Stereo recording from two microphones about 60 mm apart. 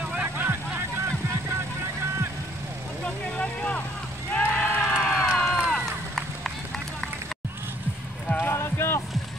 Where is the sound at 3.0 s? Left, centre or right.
Left.